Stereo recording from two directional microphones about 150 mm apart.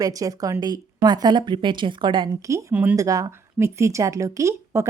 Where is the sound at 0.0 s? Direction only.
25° right (ahead or behind).